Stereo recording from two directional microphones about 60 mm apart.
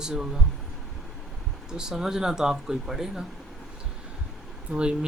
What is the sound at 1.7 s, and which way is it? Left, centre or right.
Speech, centre.